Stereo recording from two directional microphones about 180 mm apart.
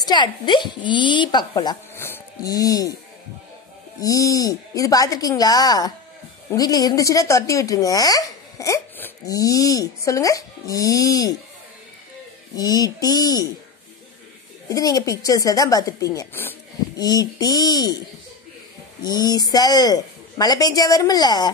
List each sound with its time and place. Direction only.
0.0 s speech: 25° left (ahead or behind)
4.0 s speech: 20° left (ahead or behind)
12.5 s speech: 20° left (ahead or behind)
14.7 s speech: 20° left (ahead or behind)
19.0 s speech: 20° left (ahead or behind)